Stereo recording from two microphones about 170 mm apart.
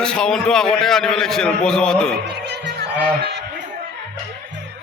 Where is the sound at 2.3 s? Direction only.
85° right.